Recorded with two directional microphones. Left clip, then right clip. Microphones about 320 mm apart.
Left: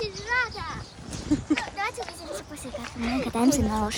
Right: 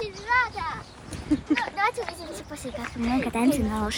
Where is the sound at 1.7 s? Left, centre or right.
Centre.